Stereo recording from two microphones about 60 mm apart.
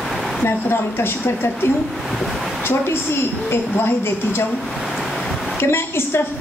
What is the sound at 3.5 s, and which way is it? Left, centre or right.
Speech, left.